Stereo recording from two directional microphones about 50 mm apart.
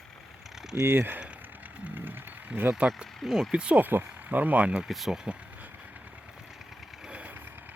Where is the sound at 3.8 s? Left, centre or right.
Right.